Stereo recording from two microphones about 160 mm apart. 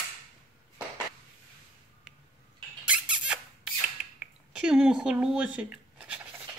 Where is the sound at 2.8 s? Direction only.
5° right (ahead or behind).